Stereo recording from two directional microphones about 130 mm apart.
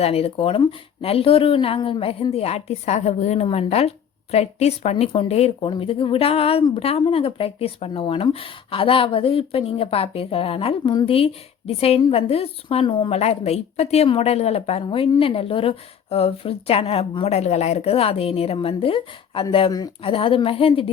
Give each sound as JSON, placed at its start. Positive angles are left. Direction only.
{"t": 0.0, "sound": "a woman's voice", "side_deg": 50}